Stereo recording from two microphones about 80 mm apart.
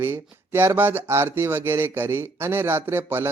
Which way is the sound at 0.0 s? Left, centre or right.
Right.